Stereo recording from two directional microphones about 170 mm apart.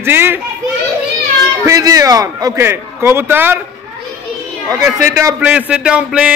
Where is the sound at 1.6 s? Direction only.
20° right (ahead or behind).